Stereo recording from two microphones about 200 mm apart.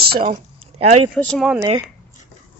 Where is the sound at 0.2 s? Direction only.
35° right (ahead or behind).